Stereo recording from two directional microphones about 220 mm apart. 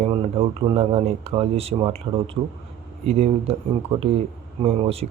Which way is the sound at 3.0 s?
30° right (ahead or behind).